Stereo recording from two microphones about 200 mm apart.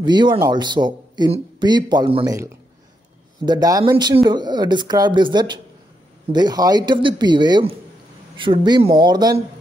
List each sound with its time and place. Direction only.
0.0 s a man's voice: 20° right (ahead or behind)